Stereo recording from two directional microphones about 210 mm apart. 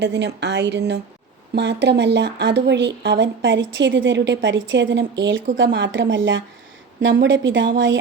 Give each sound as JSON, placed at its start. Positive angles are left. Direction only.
{"t": 0.0, "sound": "speech", "side_deg": -55}